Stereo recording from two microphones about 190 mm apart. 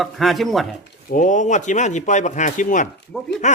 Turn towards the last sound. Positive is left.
turn(degrees=0)  # may be behind; listen again after turning